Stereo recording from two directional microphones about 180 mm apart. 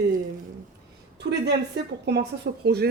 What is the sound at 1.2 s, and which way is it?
A woman's voice, 70° right (ahead or behind).